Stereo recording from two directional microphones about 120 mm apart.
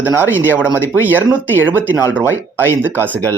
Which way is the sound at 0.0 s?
15° right (ahead or behind).